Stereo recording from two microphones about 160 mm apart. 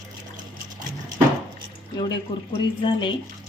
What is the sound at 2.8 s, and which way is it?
Speech, 30° left (ahead or behind).